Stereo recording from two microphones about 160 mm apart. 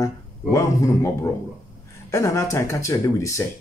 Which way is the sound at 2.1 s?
20° left (ahead or behind).